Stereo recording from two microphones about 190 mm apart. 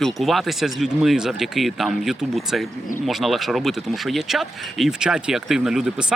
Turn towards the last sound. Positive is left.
turn(degrees=-5)  # may be behind; listen again after turning